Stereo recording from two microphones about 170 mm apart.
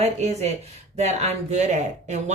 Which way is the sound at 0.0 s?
40° right (ahead or behind).